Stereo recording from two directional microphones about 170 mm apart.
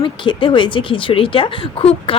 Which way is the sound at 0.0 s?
30° left (ahead or behind).